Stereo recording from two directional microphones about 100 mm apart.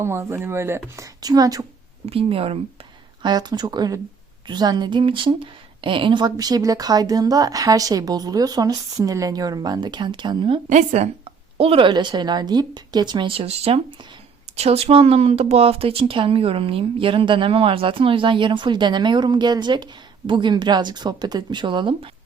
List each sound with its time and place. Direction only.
0.0 s a woman's voice: 25° right (ahead or behind)
2.0 s speech: 70° right (ahead or behind)
3.2 s a woman's voice: 45° right (ahead or behind)
11.0 s speech: 90° right
11.5 s a woman's voice: 70° right (ahead or behind)
14.5 s speech: 90° right; by 22.1 s 55° right (ahead or behind)